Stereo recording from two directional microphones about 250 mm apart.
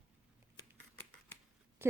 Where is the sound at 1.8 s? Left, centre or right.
Centre.